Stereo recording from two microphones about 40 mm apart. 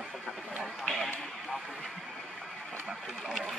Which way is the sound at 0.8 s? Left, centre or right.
Centre.